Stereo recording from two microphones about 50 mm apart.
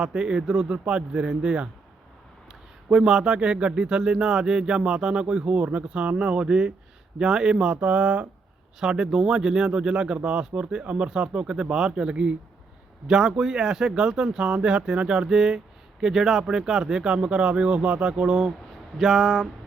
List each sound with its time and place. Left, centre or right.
0.0 s speech: centre
8.8 s speech: centre
18.9 s speech: centre